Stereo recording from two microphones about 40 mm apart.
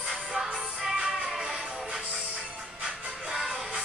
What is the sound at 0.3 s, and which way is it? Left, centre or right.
Music, centre.